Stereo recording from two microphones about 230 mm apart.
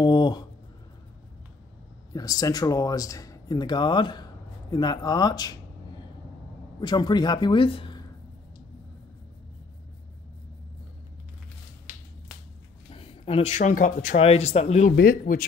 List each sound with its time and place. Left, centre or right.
0.0 s a sound: centre
2.1 s speech: centre
6.8 s speech: centre
12.9 s speech: left
15.0 s speech: left